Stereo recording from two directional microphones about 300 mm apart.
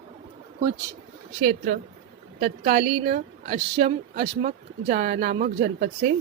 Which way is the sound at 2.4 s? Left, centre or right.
Right.